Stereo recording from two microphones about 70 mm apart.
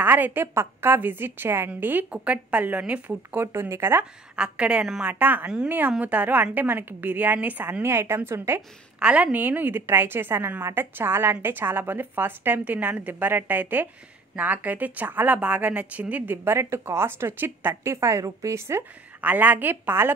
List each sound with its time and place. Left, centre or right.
0.0 s a woman's voice: right
3.3 s a woman's voice: right
4.4 s a woman's voice: centre; by 8.6 s right
9.0 s a woman's voice: right
16.5 s a woman's voice: right
19.2 s a woman's voice: right